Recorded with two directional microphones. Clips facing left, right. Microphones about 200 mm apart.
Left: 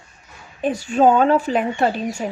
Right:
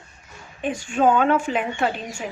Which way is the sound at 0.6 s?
40° left (ahead or behind).